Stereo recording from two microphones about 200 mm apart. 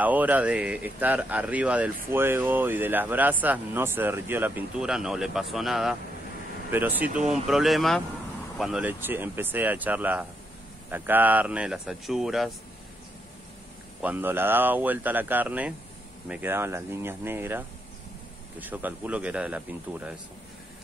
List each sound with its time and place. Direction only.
0.0 s speech: 10° right (ahead or behind)
14.0 s speech: 10° right (ahead or behind)